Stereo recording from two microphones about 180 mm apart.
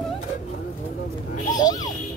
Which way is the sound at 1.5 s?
20° left (ahead or behind).